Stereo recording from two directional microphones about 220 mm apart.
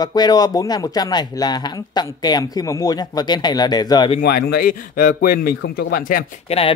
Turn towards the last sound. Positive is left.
turn(degrees=25)  # may be behind; listen again after turning